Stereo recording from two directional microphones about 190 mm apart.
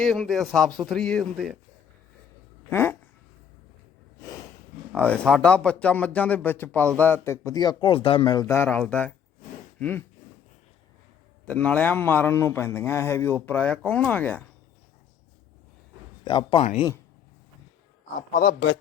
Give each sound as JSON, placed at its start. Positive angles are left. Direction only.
{"t": 0.0, "sound": "speech", "side_deg": 0}
{"t": 2.6, "sound": "a sound", "side_deg": 10}
{"t": 4.9, "sound": "a man's voice", "side_deg": 5}
{"t": 9.7, "sound": "a sound", "side_deg": 5}
{"t": 11.4, "sound": "a man's voice", "side_deg": 10}
{"t": 16.2, "sound": "a man's voice", "side_deg": 25}